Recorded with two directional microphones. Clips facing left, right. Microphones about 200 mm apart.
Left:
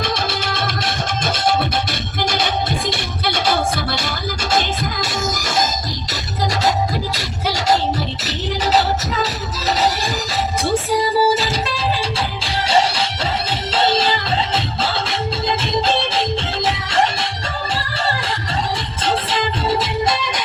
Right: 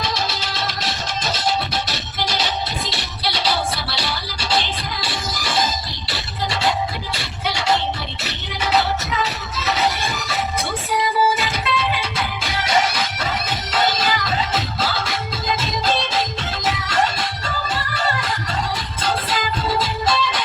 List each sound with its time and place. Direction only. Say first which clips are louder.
0.0 s music: left 3 dB; 55° left (ahead or behind)
6.1 s a sound: left 3 dB; 40° left (ahead or behind)
7.4 s music: left 3 dB; 40° left (ahead or behind); by 16.0 s 25° left (ahead or behind)
19.0 s music: left 3 dB; 25° left (ahead or behind)